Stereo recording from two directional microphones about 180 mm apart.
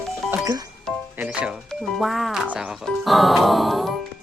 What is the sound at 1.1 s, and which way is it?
Music, 5° right (ahead or behind).